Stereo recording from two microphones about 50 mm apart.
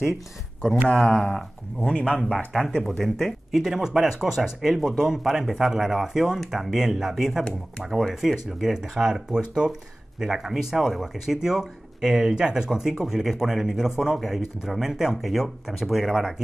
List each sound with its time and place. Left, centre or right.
0.8 s speech: centre
1.2 s speech: centre
2.0 s speech: left
2.3 s speech: centre
3.6 s speech: centre